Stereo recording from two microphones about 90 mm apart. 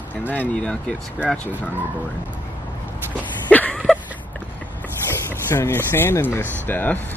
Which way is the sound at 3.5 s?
15° left (ahead or behind).